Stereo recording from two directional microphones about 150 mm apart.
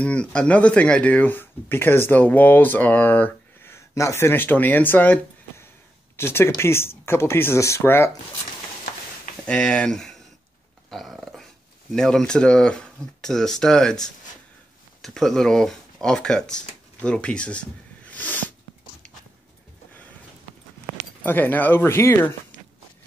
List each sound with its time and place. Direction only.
0.0 s speech: 5° left (ahead or behind)
9.5 s speech: 5° left (ahead or behind)
10.9 s dog: centre (ahead or behind)
11.9 s speech: 5° left (ahead or behind)
15.0 s speech: centre (ahead or behind)
21.2 s speech: 10° left (ahead or behind)